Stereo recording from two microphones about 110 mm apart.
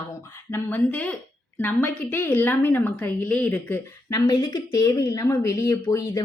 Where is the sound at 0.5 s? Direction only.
15° left (ahead or behind).